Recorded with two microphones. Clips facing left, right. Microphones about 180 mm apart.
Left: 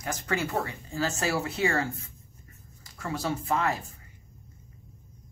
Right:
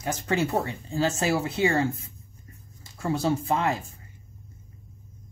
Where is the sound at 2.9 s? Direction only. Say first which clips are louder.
Right 6 dB; 25° right (ahead or behind).